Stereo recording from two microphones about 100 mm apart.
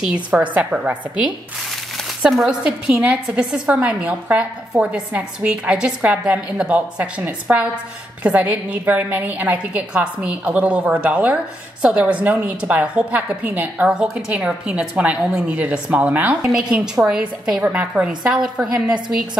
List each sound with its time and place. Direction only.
0.0 s a woman's voice: 10° right (ahead or behind)